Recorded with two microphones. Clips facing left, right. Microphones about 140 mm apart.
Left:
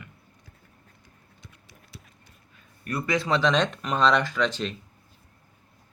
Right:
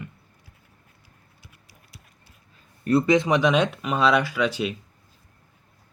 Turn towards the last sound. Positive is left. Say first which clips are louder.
# right 2 dB
turn(degrees=-10)  # may be behind; listen again after turning